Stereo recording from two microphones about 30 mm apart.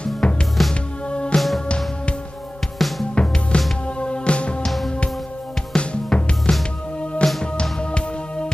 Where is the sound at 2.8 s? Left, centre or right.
Centre.